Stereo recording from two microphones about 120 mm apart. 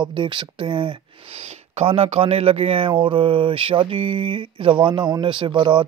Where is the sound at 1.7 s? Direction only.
55° right (ahead or behind).